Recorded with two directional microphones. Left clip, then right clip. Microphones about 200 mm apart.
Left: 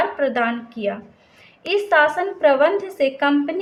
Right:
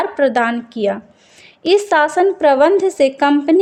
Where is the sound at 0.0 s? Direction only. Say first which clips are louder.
Right 5 dB; 40° right (ahead or behind).